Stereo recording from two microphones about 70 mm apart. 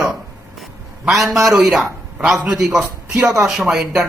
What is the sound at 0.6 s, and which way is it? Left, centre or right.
A man's voice, centre.